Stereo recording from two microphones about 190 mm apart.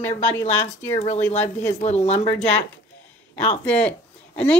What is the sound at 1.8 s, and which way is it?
Speech, 35° left (ahead or behind).